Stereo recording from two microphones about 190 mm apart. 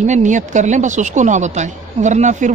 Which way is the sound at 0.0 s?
40° right (ahead or behind).